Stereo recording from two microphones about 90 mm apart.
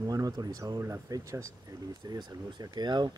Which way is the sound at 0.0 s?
45° right (ahead or behind).